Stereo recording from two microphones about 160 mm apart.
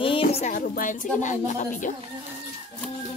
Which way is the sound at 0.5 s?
60° left (ahead or behind).